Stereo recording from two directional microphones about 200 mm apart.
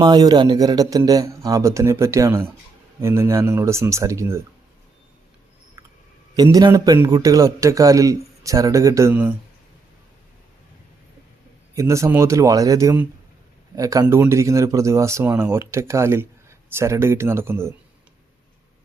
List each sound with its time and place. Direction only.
0.0 s speech: 20° right (ahead or behind)
6.3 s speech: 20° right (ahead or behind)
11.7 s speech: 15° right (ahead or behind)